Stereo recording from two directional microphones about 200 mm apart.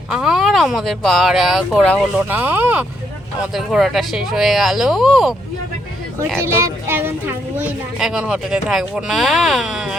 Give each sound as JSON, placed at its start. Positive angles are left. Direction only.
{"t": 0.1, "sound": "a child's voice", "side_deg": -5}
{"t": 6.1, "sound": "a child's voice", "side_deg": -10}